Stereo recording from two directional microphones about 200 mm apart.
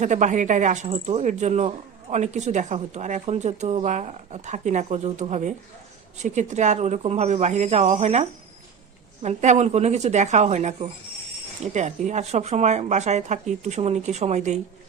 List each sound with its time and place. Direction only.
0.0 s speech: 35° right (ahead or behind)